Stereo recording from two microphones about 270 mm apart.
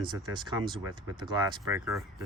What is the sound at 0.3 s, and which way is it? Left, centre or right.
Speech, centre.